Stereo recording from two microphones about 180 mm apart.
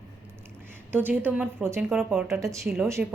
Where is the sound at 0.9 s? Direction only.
10° right (ahead or behind).